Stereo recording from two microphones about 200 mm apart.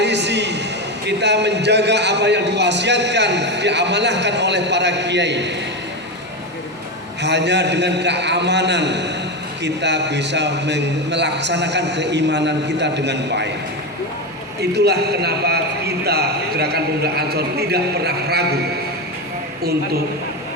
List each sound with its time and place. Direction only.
0.0 s a sound: 60° right (ahead or behind)
1.0 s a man's voice: 60° right (ahead or behind)
7.2 s a man's voice: 60° right (ahead or behind)
14.6 s a man's voice: 55° right (ahead or behind)